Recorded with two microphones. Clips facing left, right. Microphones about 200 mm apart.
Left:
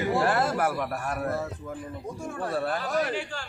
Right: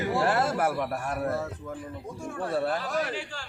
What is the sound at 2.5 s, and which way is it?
Speech, 25° right (ahead or behind).